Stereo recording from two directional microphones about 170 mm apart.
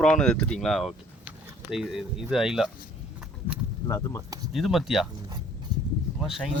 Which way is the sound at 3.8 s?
20° left (ahead or behind).